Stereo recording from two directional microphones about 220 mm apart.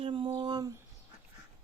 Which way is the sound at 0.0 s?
25° right (ahead or behind).